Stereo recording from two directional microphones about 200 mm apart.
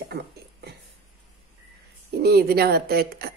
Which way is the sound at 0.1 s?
55° right (ahead or behind).